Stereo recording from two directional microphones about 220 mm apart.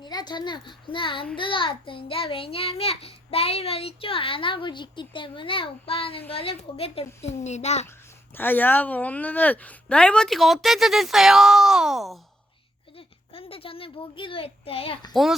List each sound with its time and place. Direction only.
0.0 s a woman's voice: 20° left (ahead or behind)
8.4 s a woman's voice: 10° left (ahead or behind)
13.0 s a child's voice: 25° left (ahead or behind)
15.1 s a woman's voice: centre (ahead or behind)